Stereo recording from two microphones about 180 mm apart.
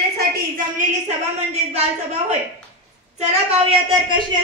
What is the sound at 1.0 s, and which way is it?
Speech, 35° right (ahead or behind).